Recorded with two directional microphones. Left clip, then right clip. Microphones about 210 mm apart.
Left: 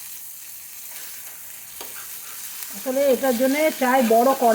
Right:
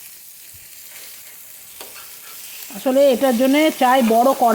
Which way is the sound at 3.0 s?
50° right (ahead or behind).